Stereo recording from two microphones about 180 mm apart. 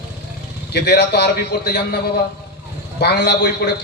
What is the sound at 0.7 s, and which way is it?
A man's voice, 65° left (ahead or behind).